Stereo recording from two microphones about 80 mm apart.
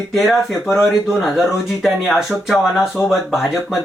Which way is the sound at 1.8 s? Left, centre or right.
Centre.